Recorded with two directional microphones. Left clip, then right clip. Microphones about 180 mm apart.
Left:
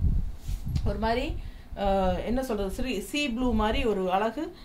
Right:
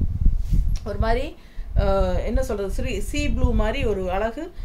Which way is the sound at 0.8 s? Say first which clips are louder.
Right 3 dB; 25° right (ahead or behind).